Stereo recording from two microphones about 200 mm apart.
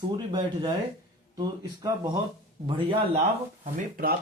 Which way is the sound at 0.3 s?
20° right (ahead or behind).